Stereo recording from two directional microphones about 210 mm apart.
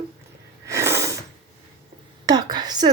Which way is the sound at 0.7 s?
15° right (ahead or behind).